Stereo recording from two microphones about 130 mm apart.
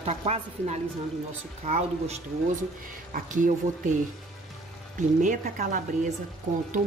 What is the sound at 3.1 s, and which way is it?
Speech, 80° right.